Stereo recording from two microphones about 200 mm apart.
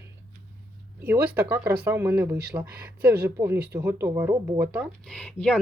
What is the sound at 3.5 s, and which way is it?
Speech, 55° right (ahead or behind).